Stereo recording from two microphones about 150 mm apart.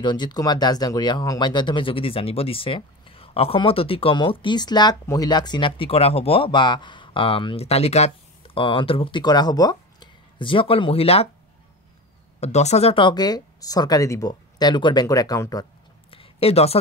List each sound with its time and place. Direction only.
0.0 s speech: 30° left (ahead or behind)
12.4 s speech: 45° left (ahead or behind); by 15.6 s 25° left (ahead or behind)
16.1 s a sound: 40° left (ahead or behind)